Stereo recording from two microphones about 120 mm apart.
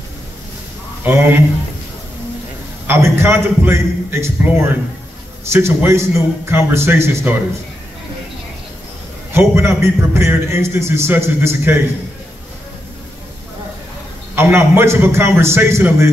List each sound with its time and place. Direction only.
1.0 s a man's voice: 20° right (ahead or behind)
2.9 s a man's voice: 20° right (ahead or behind)
9.3 s a man's voice: 20° right (ahead or behind)
14.3 s a man's voice: 20° right (ahead or behind)